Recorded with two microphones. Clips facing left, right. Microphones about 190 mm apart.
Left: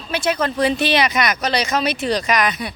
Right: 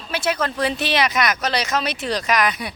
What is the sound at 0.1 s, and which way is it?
Speech, 5° right (ahead or behind).